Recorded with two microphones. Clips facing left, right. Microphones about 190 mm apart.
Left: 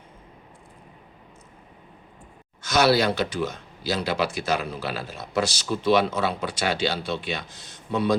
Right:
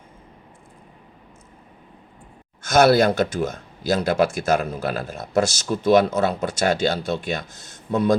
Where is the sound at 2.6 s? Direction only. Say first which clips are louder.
Right 5 dB; 50° right (ahead or behind).